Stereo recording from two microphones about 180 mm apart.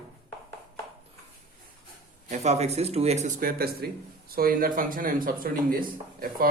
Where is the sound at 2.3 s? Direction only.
40° right (ahead or behind).